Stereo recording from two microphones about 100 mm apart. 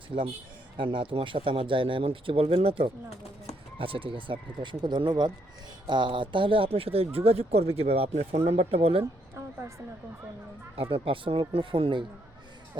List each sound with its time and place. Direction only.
0.8 s speech: 55° right (ahead or behind); by 9.0 s 70° right (ahead or behind)
9.3 s a woman's voice: 30° right (ahead or behind)
10.8 s speech: 70° right (ahead or behind)